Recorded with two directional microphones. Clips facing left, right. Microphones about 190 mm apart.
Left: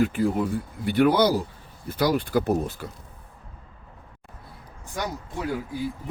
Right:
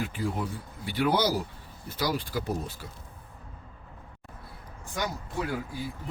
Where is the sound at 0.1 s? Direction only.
60° left (ahead or behind).